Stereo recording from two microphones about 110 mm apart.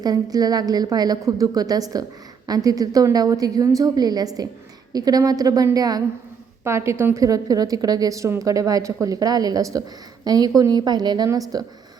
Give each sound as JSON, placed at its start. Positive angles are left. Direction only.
{"t": 0.0, "sound": "a woman's voice", "side_deg": -35}
{"t": 6.7, "sound": "a woman's voice", "side_deg": -25}